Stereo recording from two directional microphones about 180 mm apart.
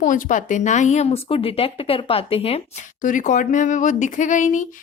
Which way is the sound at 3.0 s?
45° left (ahead or behind).